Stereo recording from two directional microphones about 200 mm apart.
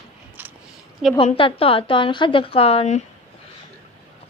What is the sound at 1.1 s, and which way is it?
A woman's voice, 25° left (ahead or behind).